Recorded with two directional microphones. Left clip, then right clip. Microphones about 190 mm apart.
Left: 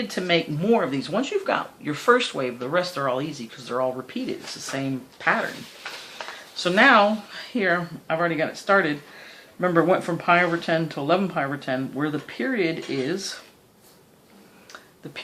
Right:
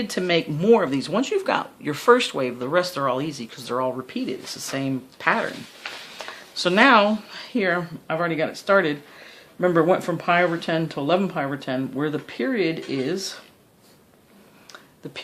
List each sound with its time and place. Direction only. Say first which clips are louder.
0.1 s speech: right 1 dB; 55° right (ahead or behind)
6.6 s speech: even; 55° right (ahead or behind)